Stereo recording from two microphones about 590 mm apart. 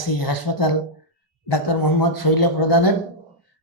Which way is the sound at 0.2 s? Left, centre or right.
Left.